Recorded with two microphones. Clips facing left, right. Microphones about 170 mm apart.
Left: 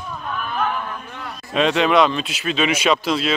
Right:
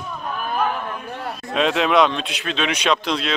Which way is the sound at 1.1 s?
30° right (ahead or behind).